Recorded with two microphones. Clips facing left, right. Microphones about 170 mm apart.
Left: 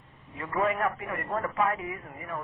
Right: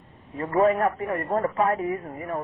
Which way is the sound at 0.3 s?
40° right (ahead or behind).